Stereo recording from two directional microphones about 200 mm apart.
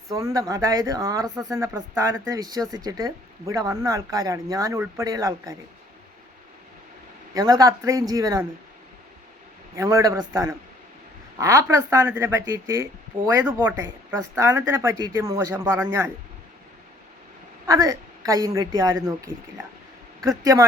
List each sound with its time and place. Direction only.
0.1 s speech: 15° right (ahead or behind)
7.3 s speech: 15° right (ahead or behind)
9.7 s speech: 15° right (ahead or behind)
17.7 s speech: 15° right (ahead or behind)
20.3 s speech: 15° right (ahead or behind)